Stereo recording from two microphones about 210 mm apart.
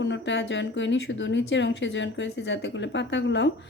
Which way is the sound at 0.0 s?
60° left (ahead or behind).